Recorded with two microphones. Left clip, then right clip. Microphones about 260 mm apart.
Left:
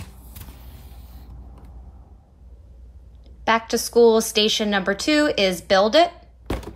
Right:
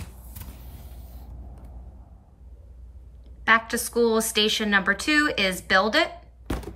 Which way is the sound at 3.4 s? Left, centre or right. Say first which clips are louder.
Even; centre.